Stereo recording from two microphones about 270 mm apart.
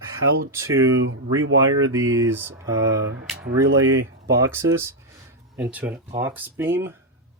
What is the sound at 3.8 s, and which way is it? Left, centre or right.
Speech, right.